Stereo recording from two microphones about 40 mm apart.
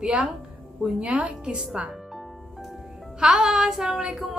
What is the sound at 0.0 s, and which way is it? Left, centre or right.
A woman's voice, right.